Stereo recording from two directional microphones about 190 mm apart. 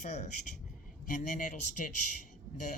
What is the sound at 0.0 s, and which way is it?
Speech, 40° left (ahead or behind).